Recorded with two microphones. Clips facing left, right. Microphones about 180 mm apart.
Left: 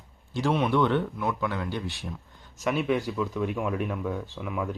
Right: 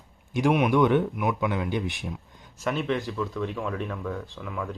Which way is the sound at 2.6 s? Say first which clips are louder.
Left 1 dB; 5° left (ahead or behind).